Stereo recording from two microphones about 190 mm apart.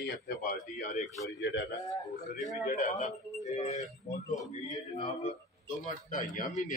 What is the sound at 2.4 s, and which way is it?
A man's voice, 40° left (ahead or behind).